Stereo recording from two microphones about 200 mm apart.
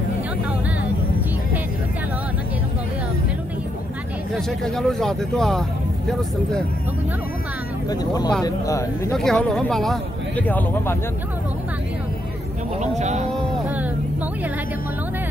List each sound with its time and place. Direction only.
4.3 s speech: centre (ahead or behind)
7.9 s speech: 20° left (ahead or behind)
9.1 s speech: centre (ahead or behind)
12.8 s speech: 35° right (ahead or behind)